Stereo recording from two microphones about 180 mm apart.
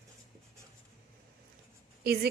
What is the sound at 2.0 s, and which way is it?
Speech, 60° right (ahead or behind).